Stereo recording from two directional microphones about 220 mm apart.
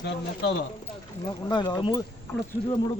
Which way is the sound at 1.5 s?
20° left (ahead or behind).